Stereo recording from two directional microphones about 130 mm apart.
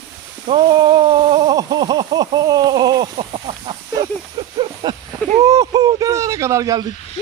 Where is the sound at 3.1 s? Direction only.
45° right (ahead or behind).